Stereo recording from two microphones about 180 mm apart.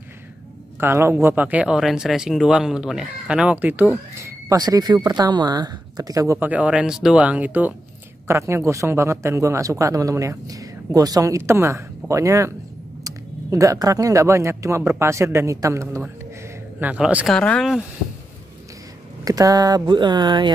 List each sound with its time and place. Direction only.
0.7 s speech: 15° right (ahead or behind)
17.4 s speech: 5° left (ahead or behind)
19.2 s speech: 20° right (ahead or behind)